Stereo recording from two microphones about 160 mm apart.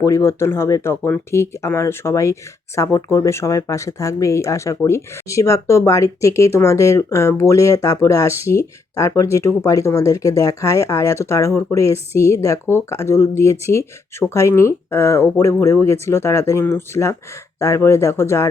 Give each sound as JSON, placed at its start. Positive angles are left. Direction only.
{"t": 0.0, "sound": "speech", "side_deg": 15}